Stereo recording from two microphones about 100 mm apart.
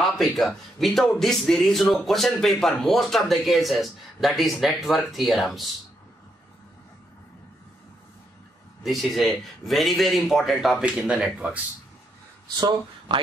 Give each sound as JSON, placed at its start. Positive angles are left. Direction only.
{"t": 0.0, "sound": "a sound", "side_deg": 0}
{"t": 0.4, "sound": "speech", "side_deg": 0}
{"t": 8.8, "sound": "speech", "side_deg": 0}
{"t": 12.5, "sound": "speech", "side_deg": -45}